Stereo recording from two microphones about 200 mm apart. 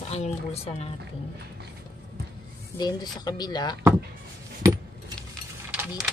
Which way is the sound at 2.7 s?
20° left (ahead or behind).